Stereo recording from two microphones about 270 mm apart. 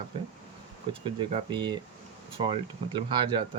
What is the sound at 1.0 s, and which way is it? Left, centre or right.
Speech, centre.